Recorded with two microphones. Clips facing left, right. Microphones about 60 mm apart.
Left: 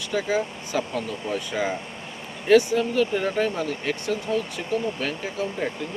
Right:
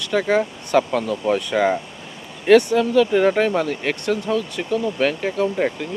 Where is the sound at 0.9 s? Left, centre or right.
Right.